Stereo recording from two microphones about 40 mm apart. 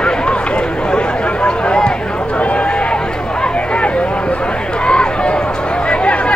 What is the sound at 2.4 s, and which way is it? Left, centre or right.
Run, left.